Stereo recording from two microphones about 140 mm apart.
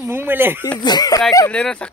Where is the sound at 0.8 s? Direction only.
30° left (ahead or behind).